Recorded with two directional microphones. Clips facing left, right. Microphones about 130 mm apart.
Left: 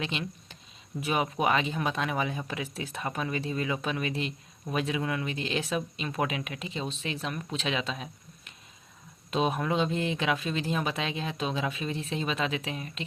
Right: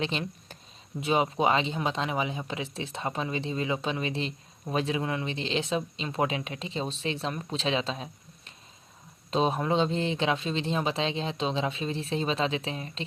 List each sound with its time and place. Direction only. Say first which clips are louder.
0.0 s speech: right 3 dB; 35° right (ahead or behind)
0.9 s speech: right 3 dB; 25° right (ahead or behind)